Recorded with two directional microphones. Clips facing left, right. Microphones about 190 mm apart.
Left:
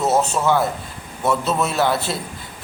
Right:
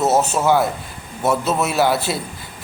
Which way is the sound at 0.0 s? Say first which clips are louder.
Right 2 dB; 5° right (ahead or behind).